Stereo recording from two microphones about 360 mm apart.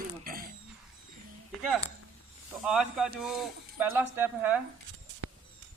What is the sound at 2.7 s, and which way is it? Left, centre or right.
Speech, centre.